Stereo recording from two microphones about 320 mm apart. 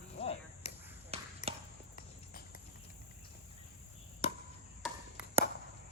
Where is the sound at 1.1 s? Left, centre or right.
Centre.